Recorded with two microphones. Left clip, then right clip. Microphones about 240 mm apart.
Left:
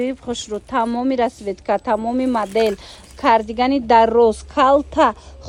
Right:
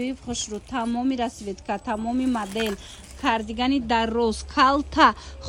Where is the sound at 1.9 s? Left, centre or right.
Left.